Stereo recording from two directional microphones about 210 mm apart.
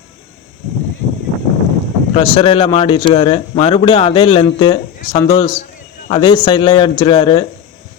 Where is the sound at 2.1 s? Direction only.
25° left (ahead or behind).